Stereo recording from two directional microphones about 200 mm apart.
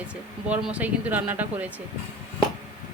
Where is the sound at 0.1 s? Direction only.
5° right (ahead or behind).